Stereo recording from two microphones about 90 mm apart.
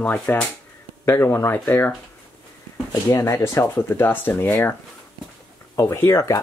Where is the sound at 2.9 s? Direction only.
35° left (ahead or behind).